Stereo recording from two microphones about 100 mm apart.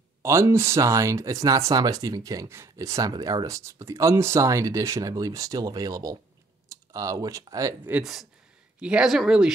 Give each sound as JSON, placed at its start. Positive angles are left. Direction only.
{"t": 0.2, "sound": "speech", "side_deg": -30}
{"t": 8.0, "sound": "speech", "side_deg": -5}